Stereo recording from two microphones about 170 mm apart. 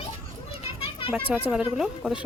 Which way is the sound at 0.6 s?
35° left (ahead or behind).